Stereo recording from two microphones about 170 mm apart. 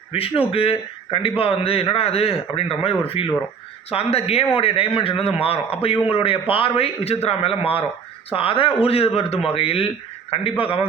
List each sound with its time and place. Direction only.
0.1 s a man's voice: 35° left (ahead or behind)